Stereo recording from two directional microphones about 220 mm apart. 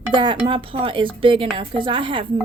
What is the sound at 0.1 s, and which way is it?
A woman's voice, 20° right (ahead or behind).